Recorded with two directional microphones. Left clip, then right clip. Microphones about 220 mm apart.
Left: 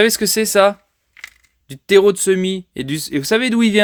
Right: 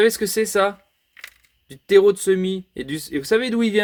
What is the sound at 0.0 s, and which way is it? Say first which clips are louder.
Speech: left 3 dB; 40° left (ahead or behind).